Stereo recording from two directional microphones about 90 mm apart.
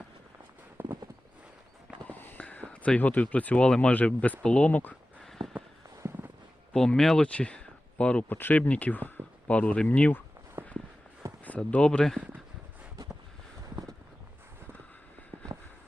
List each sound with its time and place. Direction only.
0.8 s clip-clop: 20° right (ahead or behind)
2.0 s speech: 20° left (ahead or behind)
5.4 s a sound: 55° right (ahead or behind)
6.7 s speech: 5° left (ahead or behind)
10.6 s walk: 30° right (ahead or behind)
11.4 s speech: 15° left (ahead or behind)
15.5 s a sound: 35° right (ahead or behind)